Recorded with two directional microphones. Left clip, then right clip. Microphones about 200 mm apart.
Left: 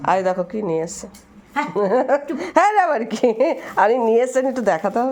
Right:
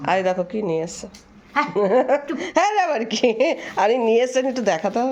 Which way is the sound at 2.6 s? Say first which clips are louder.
Left 3 dB; 40° left (ahead or behind).